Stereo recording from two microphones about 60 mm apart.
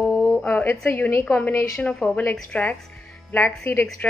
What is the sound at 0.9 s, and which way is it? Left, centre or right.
Speech, left.